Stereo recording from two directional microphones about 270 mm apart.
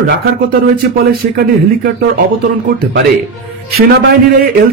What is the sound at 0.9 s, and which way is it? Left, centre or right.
Speech, right.